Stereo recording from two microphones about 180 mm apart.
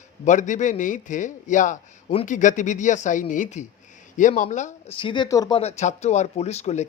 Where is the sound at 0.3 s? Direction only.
45° left (ahead or behind).